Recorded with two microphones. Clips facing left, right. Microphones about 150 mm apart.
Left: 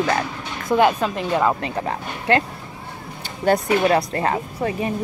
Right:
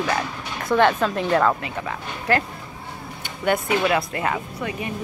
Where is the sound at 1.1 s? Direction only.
Centre (ahead or behind).